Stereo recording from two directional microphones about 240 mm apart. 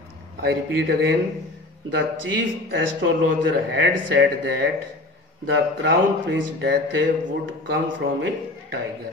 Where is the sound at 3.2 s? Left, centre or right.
Right.